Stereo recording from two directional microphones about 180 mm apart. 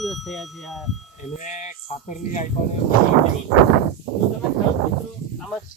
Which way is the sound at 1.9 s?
40° left (ahead or behind).